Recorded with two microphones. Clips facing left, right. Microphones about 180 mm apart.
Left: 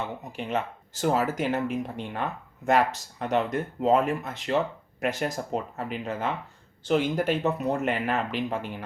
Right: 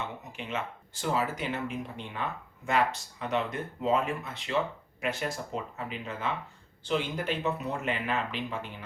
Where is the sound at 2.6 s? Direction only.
45° left (ahead or behind).